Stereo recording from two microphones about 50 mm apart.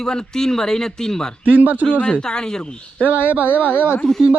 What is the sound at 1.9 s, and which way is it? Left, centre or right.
Speech, left.